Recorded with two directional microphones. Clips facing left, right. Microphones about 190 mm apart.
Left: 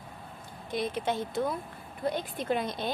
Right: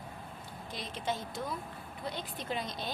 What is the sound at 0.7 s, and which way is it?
A woman's voice, 55° left (ahead or behind).